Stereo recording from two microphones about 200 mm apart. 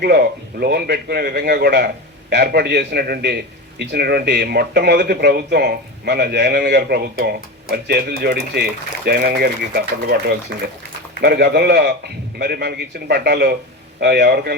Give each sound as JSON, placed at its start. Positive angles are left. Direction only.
{"t": 0.0, "sound": "a man's voice", "side_deg": -55}